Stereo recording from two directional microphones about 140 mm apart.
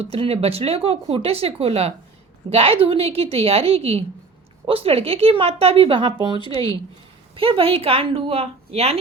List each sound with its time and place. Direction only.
0.0 s speech: 45° right (ahead or behind)
6.4 s speech: 30° left (ahead or behind)
7.3 s speech: 40° right (ahead or behind)